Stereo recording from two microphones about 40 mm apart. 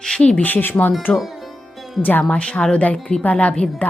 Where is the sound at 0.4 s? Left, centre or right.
Left.